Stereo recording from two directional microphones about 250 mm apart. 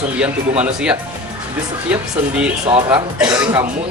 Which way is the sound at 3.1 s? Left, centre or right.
Centre.